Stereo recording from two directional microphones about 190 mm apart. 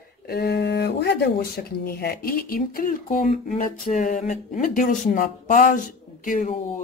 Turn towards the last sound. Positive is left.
turn(degrees=40)  # may be behind; listen again after turning